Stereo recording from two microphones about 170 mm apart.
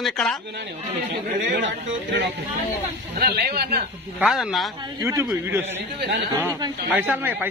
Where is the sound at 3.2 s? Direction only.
65° right (ahead or behind).